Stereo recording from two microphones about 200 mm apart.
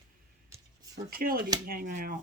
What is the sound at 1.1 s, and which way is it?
Speech, 45° right (ahead or behind).